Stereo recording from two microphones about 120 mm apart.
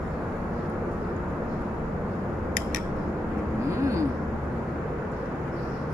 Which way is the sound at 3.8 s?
25° right (ahead or behind).